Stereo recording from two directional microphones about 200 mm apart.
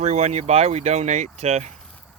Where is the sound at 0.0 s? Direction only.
35° right (ahead or behind).